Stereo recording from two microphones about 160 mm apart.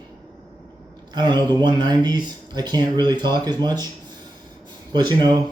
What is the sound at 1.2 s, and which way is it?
A man's voice, 30° right (ahead or behind).